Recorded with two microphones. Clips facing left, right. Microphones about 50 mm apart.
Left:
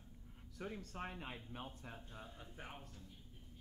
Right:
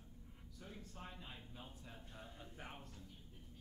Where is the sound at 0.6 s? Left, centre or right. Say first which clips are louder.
Left 8 dB; left.